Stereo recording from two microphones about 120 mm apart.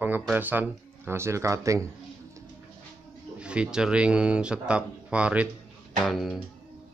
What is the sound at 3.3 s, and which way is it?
Speech, 10° right (ahead or behind).